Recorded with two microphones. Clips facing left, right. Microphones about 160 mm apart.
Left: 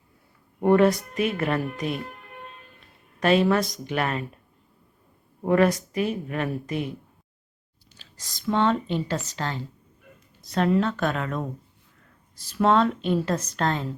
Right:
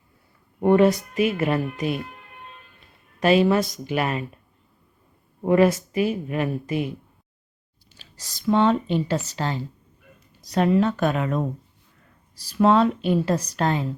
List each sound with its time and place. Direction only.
0.6 s speech: 5° right (ahead or behind)
3.2 s speech: 5° right (ahead or behind)
5.4 s speech: 5° right (ahead or behind)
8.4 s speech: 15° right (ahead or behind)
10.7 s speech: 15° right (ahead or behind)
12.5 s speech: 10° right (ahead or behind)